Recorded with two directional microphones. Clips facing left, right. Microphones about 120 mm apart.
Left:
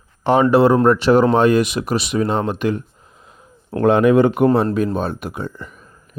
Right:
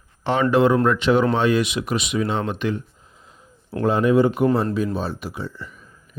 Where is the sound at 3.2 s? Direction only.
55° left (ahead or behind).